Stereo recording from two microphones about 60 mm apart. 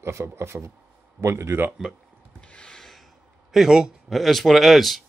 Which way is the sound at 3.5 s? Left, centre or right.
Centre.